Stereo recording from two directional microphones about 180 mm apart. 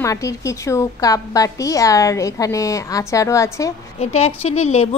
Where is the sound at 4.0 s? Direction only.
35° left (ahead or behind).